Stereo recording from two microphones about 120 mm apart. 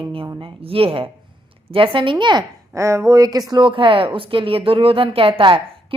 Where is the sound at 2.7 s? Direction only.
25° right (ahead or behind).